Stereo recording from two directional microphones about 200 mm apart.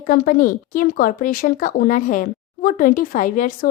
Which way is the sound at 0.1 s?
45° left (ahead or behind).